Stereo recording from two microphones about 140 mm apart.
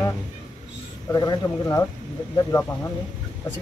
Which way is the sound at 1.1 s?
25° left (ahead or behind).